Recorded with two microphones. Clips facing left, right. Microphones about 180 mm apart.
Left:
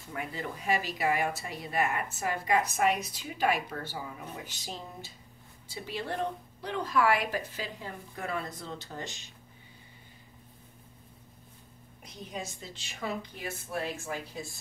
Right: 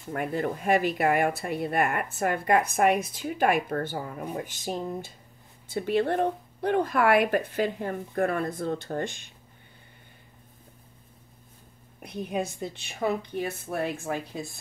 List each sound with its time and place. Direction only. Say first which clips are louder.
0.1 s speech: right 9 dB; 55° right (ahead or behind)
12.0 s speech: right 10 dB; 60° right (ahead or behind)